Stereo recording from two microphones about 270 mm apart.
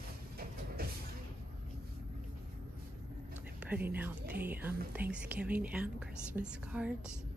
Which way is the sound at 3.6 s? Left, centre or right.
Centre.